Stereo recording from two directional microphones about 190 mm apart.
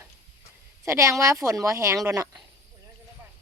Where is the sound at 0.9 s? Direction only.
15° right (ahead or behind).